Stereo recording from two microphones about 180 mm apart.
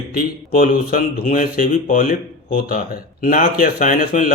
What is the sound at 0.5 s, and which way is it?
Speech, 50° left (ahead or behind).